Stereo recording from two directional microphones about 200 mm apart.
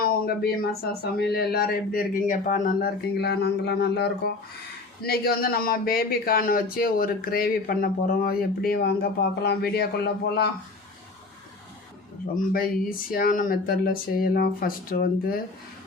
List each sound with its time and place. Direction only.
0.0 s a sound: 45° left (ahead or behind)
1.1 s speech: 55° left (ahead or behind)
12.3 s speech: 45° left (ahead or behind)